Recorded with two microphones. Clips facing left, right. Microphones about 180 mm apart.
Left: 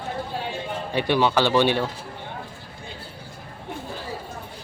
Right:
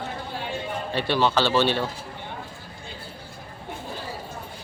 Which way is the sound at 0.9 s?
15° left (ahead or behind).